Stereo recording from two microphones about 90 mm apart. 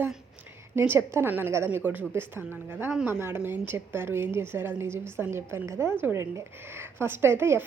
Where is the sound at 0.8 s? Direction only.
25° right (ahead or behind).